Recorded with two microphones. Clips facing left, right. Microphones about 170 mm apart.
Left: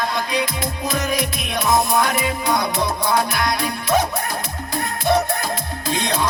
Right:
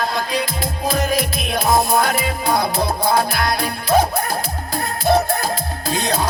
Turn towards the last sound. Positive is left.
turn(degrees=-35)  # may be behind; listen again after turning